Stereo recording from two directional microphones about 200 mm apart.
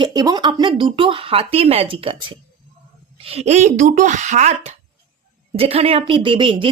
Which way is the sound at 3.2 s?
30° right (ahead or behind).